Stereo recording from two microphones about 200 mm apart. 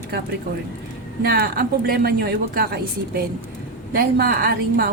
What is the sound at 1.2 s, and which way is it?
A woman's voice, 50° right (ahead or behind).